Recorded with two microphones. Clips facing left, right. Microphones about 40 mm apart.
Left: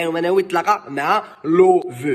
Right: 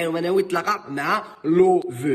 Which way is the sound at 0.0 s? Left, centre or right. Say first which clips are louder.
Left 3 dB; left.